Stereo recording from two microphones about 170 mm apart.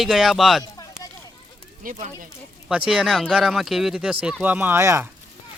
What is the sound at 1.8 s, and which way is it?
Speech, 45° right (ahead or behind).